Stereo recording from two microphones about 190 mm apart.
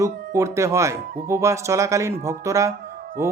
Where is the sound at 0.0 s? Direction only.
15° right (ahead or behind).